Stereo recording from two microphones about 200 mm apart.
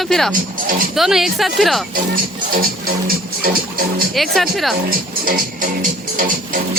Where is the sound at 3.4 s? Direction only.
45° right (ahead or behind).